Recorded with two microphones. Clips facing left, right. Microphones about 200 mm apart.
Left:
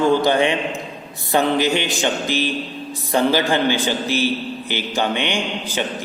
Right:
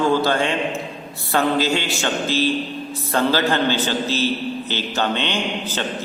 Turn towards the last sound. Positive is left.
turn(degrees=15)  # may be behind; listen again after turning